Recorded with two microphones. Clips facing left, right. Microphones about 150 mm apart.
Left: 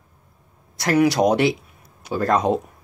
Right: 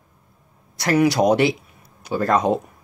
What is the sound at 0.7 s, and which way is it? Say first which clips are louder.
A man's voice: even; centre (ahead or behind).